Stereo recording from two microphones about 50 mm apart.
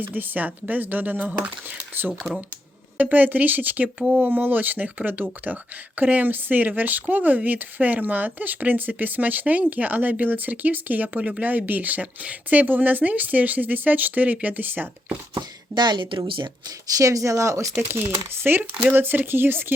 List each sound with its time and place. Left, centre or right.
0.0 s speech: right
15.7 s a woman's voice: right
17.0 s speech: right
18.1 s speech: right